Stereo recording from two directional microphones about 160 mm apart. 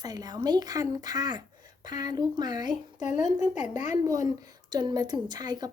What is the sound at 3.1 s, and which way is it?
Speech, 50° left (ahead or behind).